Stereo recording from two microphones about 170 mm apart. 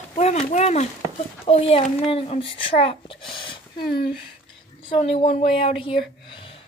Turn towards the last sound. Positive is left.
turn(degrees=30)  # may be behind; listen again after turning